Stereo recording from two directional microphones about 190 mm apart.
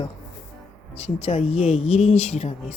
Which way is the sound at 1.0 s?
35° left (ahead or behind).